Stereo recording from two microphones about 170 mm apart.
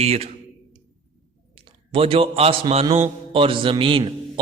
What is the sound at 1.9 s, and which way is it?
A man's voice, 35° right (ahead or behind).